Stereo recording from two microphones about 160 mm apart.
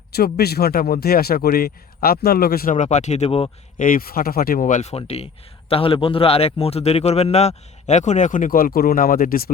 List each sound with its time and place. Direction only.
0.3 s speech: 80° left
2.7 s speech: 50° left (ahead or behind)
3.8 s speech: 55° left (ahead or behind)